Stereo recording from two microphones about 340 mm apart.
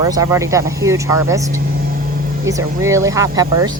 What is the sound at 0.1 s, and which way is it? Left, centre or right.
Speech, centre.